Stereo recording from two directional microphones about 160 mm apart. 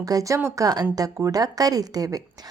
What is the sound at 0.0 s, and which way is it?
A woman's voice, 20° right (ahead or behind).